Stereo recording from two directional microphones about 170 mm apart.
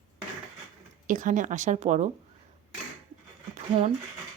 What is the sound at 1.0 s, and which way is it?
Speech, 50° right (ahead or behind).